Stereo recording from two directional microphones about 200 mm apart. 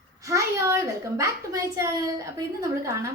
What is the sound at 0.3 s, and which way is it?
A child's voice, 15° right (ahead or behind).